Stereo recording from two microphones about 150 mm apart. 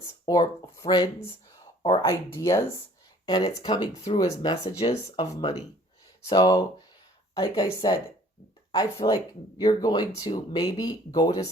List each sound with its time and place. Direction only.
0.0 s speech: 25° left (ahead or behind)